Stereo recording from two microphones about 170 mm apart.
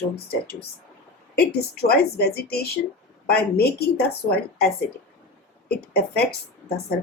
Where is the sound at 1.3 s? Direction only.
70° left (ahead or behind).